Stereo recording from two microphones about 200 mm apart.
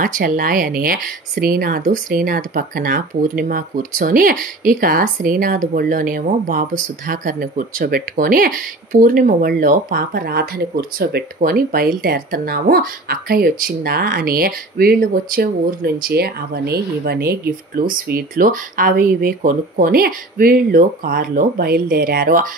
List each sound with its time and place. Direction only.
0.0 s speech: 45° right (ahead or behind)